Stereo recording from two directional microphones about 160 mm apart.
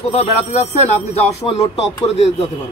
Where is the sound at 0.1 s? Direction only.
45° left (ahead or behind).